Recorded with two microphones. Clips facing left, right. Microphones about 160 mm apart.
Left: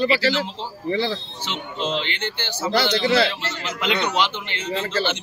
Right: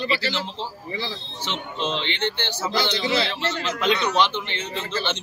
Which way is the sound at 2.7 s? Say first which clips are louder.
Left 5 dB; 65° left (ahead or behind).